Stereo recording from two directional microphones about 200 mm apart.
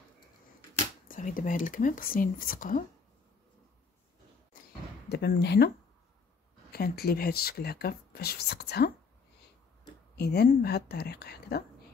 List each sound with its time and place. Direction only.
1.0 s speech: 40° left (ahead or behind)
5.1 s speech: 55° left (ahead or behind)
6.7 s speech: 50° left (ahead or behind)
10.1 s speech: 55° left (ahead or behind)